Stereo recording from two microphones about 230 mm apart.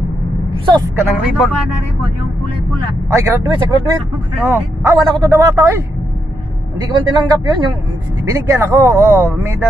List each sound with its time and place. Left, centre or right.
0.5 s speech: centre
3.1 s speech: centre